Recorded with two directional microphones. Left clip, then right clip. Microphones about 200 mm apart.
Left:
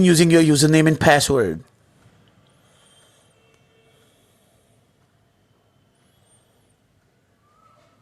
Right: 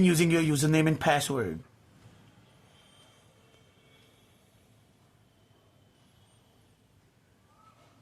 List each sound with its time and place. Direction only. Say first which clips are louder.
0.0 s speech: left 11 dB; 25° left (ahead or behind)